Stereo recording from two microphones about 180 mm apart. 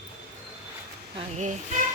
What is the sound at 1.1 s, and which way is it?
Speech, 40° right (ahead or behind).